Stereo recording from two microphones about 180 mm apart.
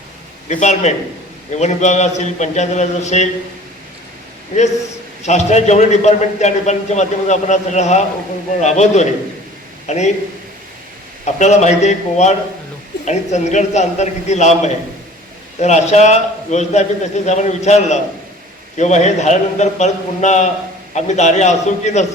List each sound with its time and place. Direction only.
0.4 s a man's voice: 40° left (ahead or behind)
5.2 s a man's voice: 40° left (ahead or behind)
11.3 s a man's voice: 40° left (ahead or behind)